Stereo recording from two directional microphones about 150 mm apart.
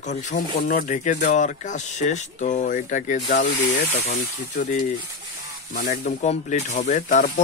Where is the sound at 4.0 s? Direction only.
90° left.